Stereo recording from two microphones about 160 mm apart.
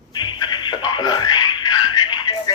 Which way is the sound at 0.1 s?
30° left (ahead or behind).